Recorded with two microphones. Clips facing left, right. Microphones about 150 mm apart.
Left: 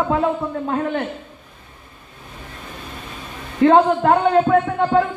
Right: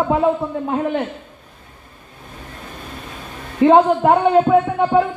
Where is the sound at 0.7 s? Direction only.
20° right (ahead or behind).